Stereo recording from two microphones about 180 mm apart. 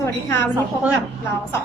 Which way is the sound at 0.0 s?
15° left (ahead or behind).